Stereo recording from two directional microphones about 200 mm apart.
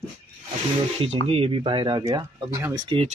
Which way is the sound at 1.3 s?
25° right (ahead or behind).